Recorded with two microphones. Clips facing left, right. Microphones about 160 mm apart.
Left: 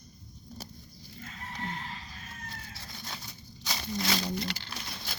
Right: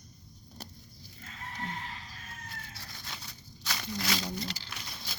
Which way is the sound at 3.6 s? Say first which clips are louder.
Left 2 dB; 20° left (ahead or behind).